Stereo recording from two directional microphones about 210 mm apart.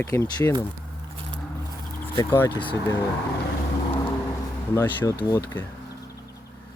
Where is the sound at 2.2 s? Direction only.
10° left (ahead or behind).